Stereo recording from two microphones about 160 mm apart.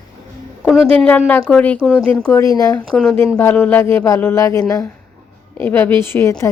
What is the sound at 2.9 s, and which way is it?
Speech, centre (ahead or behind).